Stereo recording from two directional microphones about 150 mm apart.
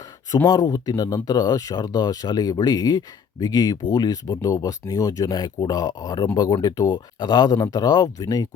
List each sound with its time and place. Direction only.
0.3 s speech: 20° left (ahead or behind)